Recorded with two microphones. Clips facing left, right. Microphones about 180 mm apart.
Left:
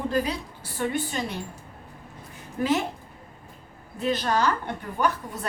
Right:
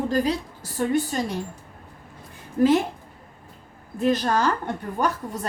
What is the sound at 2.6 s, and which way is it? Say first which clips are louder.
Speech: right 8 dB; 40° right (ahead or behind).